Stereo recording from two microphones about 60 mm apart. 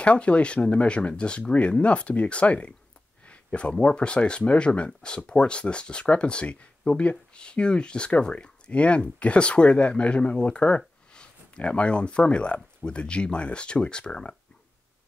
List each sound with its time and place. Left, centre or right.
0.0 s speech: centre